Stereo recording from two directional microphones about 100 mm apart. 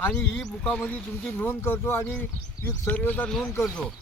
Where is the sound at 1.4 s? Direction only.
25° left (ahead or behind).